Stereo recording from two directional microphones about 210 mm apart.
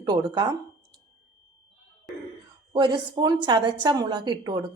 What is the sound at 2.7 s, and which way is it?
A woman's voice, 20° right (ahead or behind).